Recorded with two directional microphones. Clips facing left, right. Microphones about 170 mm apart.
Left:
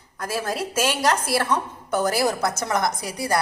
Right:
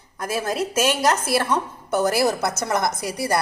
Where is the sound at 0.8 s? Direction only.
10° right (ahead or behind).